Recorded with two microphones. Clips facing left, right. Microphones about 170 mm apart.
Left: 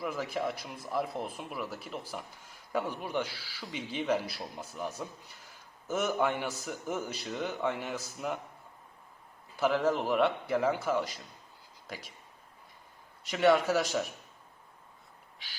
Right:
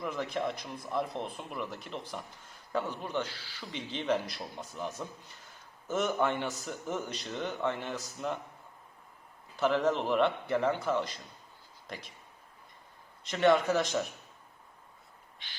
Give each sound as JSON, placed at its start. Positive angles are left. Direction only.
{"t": 0.0, "sound": "a man's voice", "side_deg": 5}
{"t": 9.6, "sound": "speech", "side_deg": 5}
{"t": 13.3, "sound": "a man's voice", "side_deg": 5}